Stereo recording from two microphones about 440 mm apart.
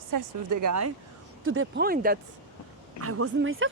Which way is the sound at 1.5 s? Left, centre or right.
Right.